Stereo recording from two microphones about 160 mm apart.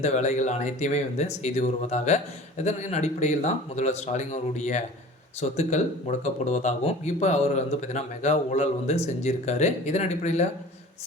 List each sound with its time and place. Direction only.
0.0 s speech: 45° left (ahead or behind)